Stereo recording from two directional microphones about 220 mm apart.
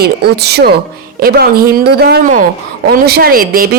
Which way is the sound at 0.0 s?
45° right (ahead or behind).